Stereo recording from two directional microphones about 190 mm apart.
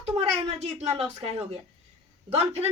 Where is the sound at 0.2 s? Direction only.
35° right (ahead or behind).